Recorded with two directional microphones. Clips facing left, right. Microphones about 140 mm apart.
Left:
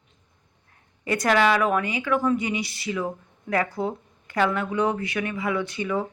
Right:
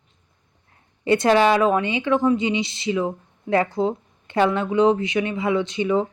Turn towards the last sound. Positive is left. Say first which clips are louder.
# right 5 dB
turn(degrees=-25)  # may be behind; listen again after turning